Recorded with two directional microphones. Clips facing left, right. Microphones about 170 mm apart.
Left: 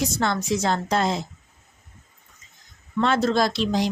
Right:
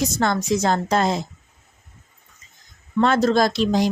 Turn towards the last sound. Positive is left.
turn(degrees=-45)  # may be behind; listen again after turning